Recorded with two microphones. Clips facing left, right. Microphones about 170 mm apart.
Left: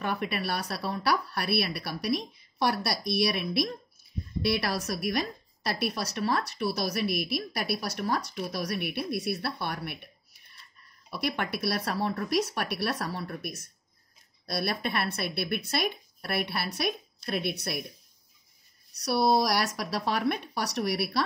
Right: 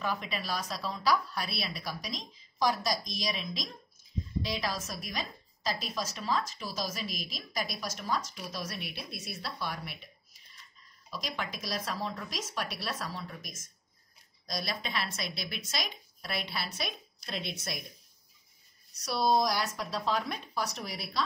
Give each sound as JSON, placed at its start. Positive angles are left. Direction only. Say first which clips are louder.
{"t": 0.0, "sound": "a woman's voice", "louder": "left 4 dB", "side_deg": 65}
{"t": 18.9, "sound": "a woman's voice", "louder": "left 3 dB", "side_deg": 65}